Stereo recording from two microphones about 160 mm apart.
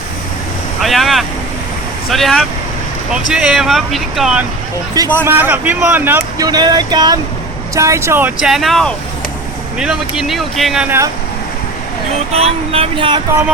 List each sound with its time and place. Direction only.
0.8 s speech: centre (ahead or behind)
6.4 s speech: 25° right (ahead or behind)
8.4 s speech: centre (ahead or behind)
10.8 s speech: 15° right (ahead or behind)
12.3 s speech: 40° right (ahead or behind)